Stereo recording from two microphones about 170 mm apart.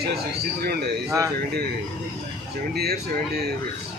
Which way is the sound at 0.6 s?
65° right (ahead or behind).